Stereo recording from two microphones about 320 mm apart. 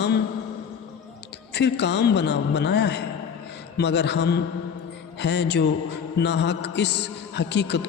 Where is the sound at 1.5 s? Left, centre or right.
Left.